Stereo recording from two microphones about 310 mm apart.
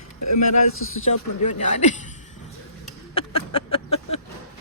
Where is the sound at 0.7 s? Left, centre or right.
Left.